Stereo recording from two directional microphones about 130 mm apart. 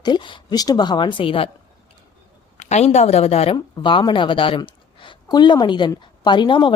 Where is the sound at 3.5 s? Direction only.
35° left (ahead or behind).